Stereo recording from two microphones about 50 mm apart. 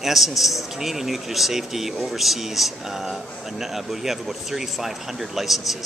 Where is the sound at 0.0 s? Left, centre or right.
Centre.